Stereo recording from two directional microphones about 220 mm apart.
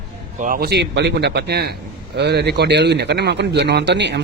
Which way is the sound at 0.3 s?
40° right (ahead or behind).